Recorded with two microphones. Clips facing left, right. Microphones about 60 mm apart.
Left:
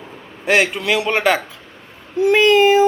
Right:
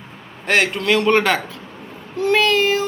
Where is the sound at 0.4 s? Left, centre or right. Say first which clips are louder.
Left 1 dB; centre.